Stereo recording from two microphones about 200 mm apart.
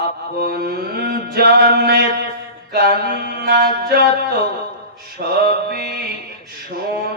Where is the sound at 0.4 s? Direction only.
50° right (ahead or behind).